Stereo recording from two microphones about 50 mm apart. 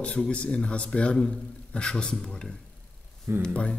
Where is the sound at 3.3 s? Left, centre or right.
Right.